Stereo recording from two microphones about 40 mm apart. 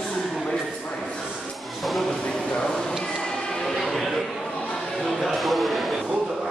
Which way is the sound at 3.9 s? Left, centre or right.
Centre.